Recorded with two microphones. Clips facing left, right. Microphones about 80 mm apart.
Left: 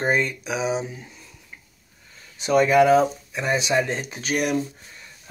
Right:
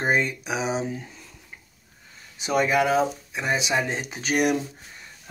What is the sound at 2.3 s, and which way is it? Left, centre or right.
Speech, centre.